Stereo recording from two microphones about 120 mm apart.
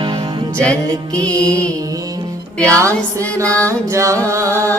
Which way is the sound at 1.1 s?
30° right (ahead or behind).